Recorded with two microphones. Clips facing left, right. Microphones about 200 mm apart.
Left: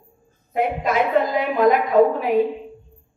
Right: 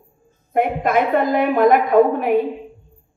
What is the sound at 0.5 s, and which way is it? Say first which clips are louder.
A woman's voice: right 3 dB; 55° right (ahead or behind).